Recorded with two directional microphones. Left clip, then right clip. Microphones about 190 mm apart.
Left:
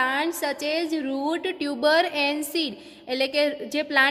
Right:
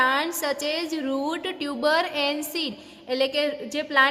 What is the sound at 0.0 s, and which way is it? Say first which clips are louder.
A woman's voice: right 2 dB; 15° left (ahead or behind).